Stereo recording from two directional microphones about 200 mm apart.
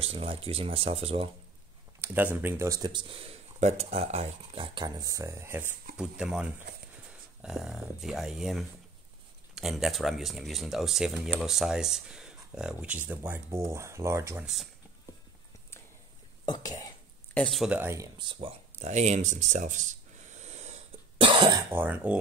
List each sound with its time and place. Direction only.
0.0 s speech: 30° right (ahead or behind)
2.0 s a sound: 10° right (ahead or behind)
2.4 s speech: 15° right (ahead or behind)
16.4 s speech: 20° left (ahead or behind)
17.3 s a sound: 5° left (ahead or behind); by 21.5 s 25° right (ahead or behind)
21.7 s speech: 10° right (ahead or behind)